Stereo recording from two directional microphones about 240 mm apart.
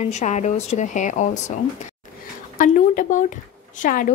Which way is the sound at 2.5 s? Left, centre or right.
Left.